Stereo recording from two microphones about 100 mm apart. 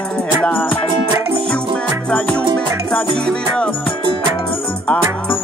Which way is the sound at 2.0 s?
10° left (ahead or behind).